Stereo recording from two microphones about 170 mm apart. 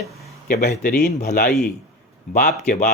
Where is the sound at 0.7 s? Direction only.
65° left (ahead or behind).